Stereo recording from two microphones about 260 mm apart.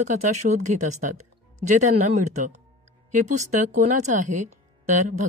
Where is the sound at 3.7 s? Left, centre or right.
Right.